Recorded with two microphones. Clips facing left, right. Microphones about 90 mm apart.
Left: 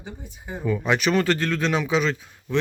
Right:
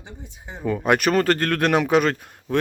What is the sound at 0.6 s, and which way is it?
Speech, 50° right (ahead or behind).